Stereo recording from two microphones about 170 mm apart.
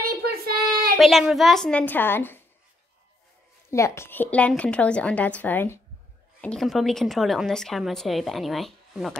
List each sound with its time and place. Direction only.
0.2 s child singing: 65° right (ahead or behind)
0.9 s a woman's voice: centre (ahead or behind)
3.7 s a woman's voice: 15° left (ahead or behind); by 9.1 s centre (ahead or behind)